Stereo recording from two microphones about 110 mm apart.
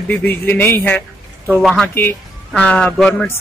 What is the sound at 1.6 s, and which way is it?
A man's voice, 5° left (ahead or behind).